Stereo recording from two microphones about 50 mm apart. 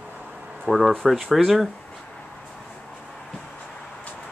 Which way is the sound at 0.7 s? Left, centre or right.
Centre.